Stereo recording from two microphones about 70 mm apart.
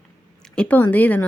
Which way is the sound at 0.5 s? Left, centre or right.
Left.